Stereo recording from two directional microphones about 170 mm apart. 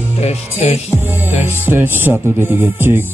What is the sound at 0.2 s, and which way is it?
Music, 40° left (ahead or behind).